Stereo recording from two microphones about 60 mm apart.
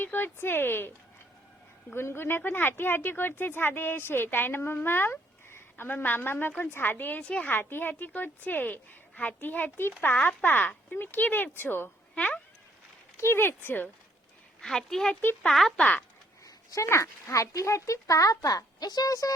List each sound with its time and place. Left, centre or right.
0.0 s speech: left
2.0 s speech: left
7.2 s speech: centre
7.5 s speech: left
12.1 s speech: left
13.1 s speech: left
14.6 s speech: centre
15.8 s speech: left
16.7 s speech: left